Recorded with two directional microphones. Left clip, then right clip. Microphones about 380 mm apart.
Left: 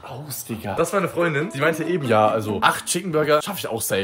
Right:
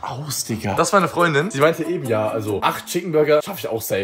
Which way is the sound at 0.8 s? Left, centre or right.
Centre.